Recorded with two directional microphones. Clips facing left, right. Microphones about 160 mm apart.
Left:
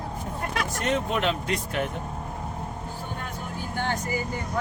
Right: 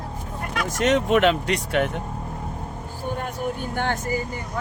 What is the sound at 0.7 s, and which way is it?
Speech, 85° right.